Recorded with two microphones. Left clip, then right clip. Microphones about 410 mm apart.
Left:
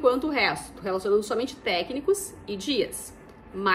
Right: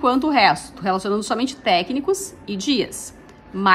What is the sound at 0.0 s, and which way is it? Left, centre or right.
A woman's voice, centre.